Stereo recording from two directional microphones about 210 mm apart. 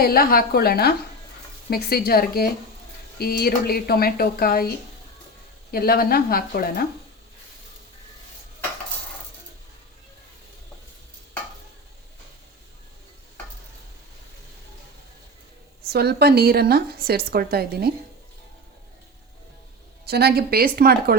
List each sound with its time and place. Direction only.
0.0 s speech: 45° left (ahead or behind)
5.7 s speech: 45° left (ahead or behind)
15.9 s a woman's voice: 50° right (ahead or behind)
20.1 s a woman's voice: 50° right (ahead or behind)